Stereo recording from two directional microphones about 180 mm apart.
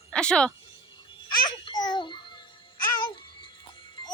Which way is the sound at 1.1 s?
25° left (ahead or behind).